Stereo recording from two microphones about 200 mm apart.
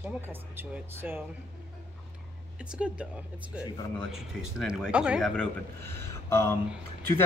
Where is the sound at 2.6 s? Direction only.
5° right (ahead or behind).